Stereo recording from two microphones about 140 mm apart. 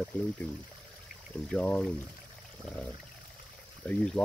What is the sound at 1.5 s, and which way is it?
Speech, 10° left (ahead or behind).